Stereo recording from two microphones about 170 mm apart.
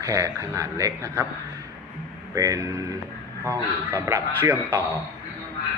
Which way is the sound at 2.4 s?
20° right (ahead or behind).